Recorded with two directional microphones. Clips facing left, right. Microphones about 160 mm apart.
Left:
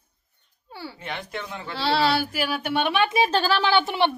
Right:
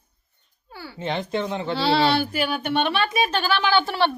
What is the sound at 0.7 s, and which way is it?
Speech, 25° left (ahead or behind).